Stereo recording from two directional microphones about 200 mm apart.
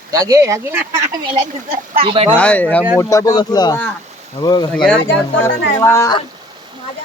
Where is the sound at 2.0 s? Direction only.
30° right (ahead or behind).